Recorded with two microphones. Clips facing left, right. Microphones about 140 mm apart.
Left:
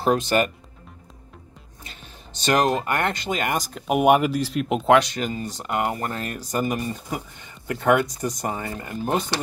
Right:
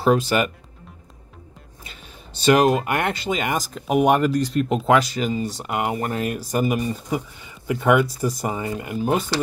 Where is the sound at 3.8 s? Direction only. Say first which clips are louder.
Even; 5° left (ahead or behind).